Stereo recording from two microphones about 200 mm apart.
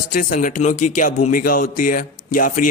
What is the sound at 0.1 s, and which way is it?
A man's voice, 45° left (ahead or behind).